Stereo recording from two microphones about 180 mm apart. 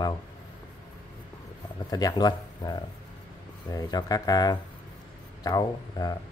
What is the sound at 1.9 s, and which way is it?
Speech, 20° left (ahead or behind).